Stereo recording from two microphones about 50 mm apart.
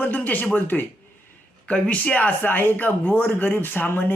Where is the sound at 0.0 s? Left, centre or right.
Left.